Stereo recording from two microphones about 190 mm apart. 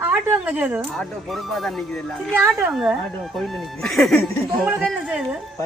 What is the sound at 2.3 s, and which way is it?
A woman's voice, 10° right (ahead or behind).